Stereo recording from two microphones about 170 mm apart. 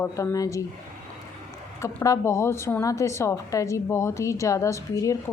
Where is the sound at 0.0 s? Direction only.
15° left (ahead or behind).